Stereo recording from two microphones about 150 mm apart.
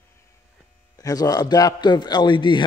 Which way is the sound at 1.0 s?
25° left (ahead or behind).